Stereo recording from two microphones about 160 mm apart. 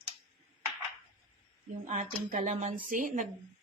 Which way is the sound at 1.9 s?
50° right (ahead or behind).